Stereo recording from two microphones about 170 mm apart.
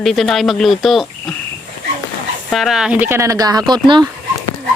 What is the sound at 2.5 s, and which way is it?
Speech, centre (ahead or behind).